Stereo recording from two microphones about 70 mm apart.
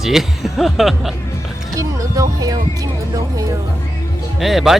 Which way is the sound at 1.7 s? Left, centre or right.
Right.